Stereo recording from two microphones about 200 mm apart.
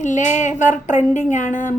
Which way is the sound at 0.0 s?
40° left (ahead or behind).